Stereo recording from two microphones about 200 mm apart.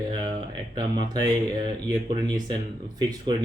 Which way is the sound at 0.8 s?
20° right (ahead or behind).